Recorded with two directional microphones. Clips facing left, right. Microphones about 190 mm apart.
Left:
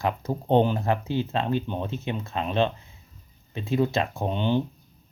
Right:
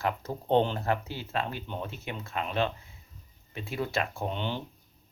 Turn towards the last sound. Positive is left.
turn(degrees=15)  # may be behind; listen again after turning